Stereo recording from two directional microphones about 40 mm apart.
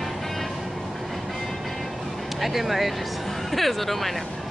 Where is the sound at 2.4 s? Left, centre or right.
Centre.